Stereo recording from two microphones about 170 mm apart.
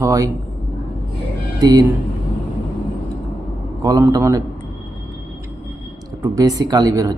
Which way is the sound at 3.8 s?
20° right (ahead or behind).